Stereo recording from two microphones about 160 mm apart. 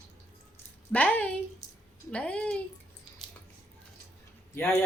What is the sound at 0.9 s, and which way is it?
Speech, 10° left (ahead or behind).